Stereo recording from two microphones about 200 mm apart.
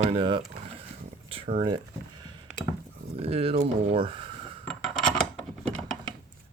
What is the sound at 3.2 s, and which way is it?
Speech, 30° right (ahead or behind).